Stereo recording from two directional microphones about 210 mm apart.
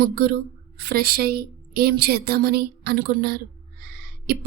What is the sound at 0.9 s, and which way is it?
A woman's voice, 45° right (ahead or behind).